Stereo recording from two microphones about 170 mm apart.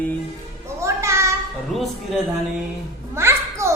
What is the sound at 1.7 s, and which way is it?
Speech, centre (ahead or behind).